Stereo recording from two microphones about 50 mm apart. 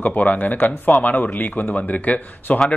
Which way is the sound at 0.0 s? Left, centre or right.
Left.